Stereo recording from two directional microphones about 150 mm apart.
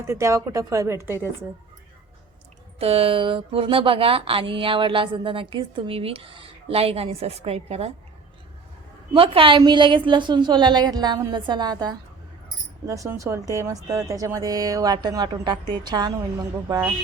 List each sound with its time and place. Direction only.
0.0 s a woman's voice: 20° right (ahead or behind)
2.7 s speech: 40° right (ahead or behind)
9.1 s a woman's voice: 35° right (ahead or behind)